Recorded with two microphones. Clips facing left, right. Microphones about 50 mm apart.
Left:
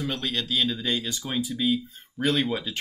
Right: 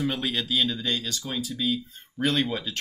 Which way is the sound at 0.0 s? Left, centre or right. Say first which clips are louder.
Right 2 dB; centre.